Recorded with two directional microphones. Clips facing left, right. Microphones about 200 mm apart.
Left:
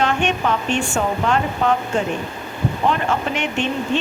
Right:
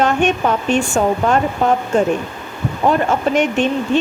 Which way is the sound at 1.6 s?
45° right (ahead or behind).